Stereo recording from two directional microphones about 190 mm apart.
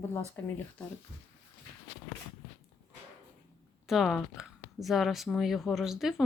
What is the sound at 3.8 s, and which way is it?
Speech, centre (ahead or behind).